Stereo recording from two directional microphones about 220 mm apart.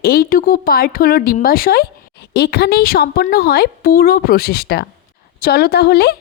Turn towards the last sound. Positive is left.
turn(degrees=45)  # may be behind; listen again after turning